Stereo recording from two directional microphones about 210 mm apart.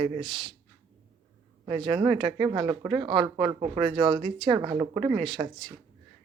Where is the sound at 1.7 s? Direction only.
30° right (ahead or behind).